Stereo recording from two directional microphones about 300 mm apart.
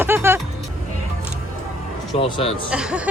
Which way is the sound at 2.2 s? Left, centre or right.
Centre.